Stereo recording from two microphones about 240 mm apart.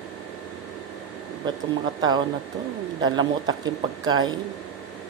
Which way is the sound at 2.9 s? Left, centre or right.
Centre.